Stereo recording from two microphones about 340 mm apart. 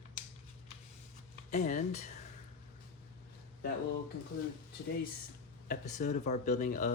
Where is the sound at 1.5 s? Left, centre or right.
Left.